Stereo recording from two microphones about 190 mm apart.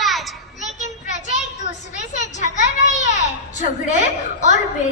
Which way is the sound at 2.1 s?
40° left (ahead or behind).